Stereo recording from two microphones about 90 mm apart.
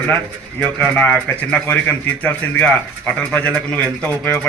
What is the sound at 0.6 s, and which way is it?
Speech, 15° left (ahead or behind).